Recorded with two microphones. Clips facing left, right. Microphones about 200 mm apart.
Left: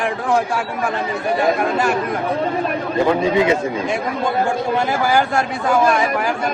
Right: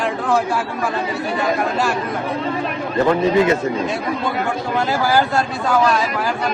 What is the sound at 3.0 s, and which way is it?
Speech, 15° left (ahead or behind).